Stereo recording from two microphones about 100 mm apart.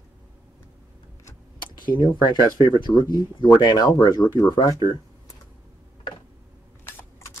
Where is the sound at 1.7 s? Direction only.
50° left (ahead or behind).